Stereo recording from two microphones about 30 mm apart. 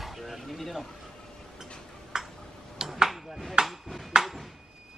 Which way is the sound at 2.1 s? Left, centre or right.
Right.